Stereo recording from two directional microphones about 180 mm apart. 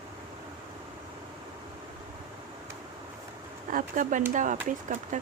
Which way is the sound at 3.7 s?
50° right (ahead or behind).